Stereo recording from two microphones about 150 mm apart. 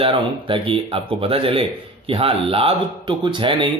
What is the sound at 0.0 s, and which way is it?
Speech, 35° right (ahead or behind).